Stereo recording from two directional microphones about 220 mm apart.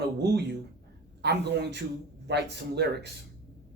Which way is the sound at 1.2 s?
50° right (ahead or behind).